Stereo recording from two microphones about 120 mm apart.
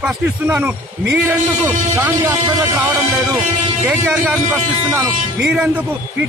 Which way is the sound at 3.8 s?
10° right (ahead or behind).